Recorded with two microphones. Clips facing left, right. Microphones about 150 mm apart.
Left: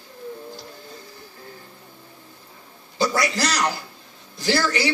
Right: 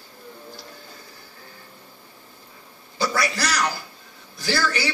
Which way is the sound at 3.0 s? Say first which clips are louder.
Left 2 dB; 20° left (ahead or behind).